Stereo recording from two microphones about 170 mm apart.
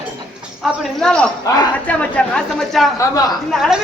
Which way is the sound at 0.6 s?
Centre (ahead or behind).